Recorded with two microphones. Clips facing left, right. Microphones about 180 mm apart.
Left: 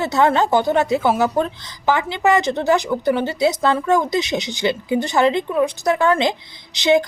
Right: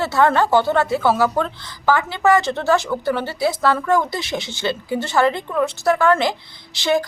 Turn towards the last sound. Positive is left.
turn(degrees=20)  # may be behind; listen again after turning